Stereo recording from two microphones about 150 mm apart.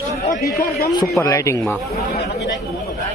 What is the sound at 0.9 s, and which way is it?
Speech, 25° left (ahead or behind).